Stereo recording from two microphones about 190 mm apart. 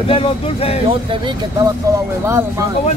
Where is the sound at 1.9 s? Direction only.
20° right (ahead or behind).